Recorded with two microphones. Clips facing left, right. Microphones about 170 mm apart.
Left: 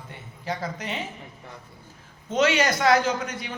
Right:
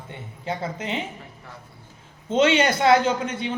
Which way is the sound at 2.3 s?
25° right (ahead or behind).